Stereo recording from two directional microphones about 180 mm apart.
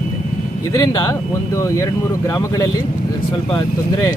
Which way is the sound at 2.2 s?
20° left (ahead or behind).